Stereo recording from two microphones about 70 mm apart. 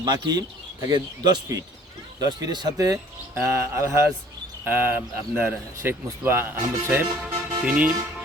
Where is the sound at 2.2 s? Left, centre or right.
Right.